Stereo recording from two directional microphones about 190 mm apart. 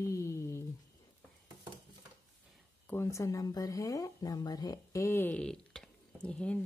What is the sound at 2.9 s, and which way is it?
Speech, 15° left (ahead or behind).